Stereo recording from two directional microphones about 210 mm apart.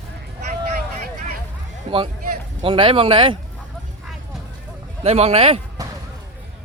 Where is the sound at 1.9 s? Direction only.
25° right (ahead or behind).